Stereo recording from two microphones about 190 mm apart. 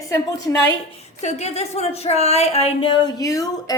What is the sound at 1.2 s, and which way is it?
Speech, 35° left (ahead or behind).